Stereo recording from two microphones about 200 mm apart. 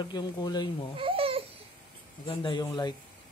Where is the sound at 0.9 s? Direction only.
25° right (ahead or behind).